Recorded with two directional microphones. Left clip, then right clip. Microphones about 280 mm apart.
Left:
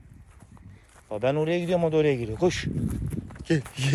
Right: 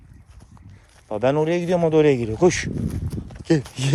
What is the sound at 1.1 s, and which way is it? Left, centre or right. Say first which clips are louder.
Speech: right 5 dB; right.